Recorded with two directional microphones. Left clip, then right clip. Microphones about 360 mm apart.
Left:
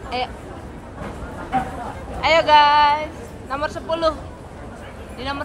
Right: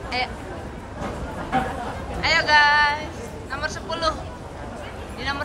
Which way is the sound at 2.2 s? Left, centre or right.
Centre.